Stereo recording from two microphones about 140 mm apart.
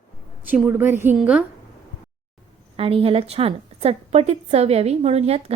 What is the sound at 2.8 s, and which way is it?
A woman's voice, 40° right (ahead or behind).